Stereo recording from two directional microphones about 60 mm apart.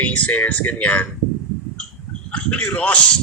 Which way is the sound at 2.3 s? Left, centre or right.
Left.